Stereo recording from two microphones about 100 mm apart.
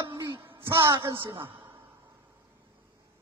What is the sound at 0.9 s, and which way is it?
Speech, 50° right (ahead or behind).